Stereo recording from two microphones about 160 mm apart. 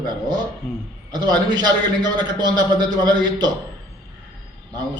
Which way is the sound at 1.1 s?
25° right (ahead or behind).